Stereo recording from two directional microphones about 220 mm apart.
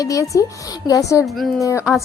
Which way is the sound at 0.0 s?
15° left (ahead or behind).